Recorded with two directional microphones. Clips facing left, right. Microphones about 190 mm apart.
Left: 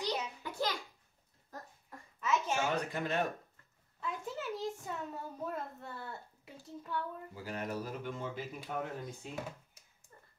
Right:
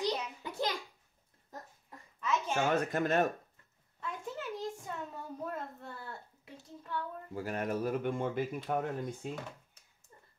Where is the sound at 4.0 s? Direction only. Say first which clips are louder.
Left 1 dB; centre (ahead or behind).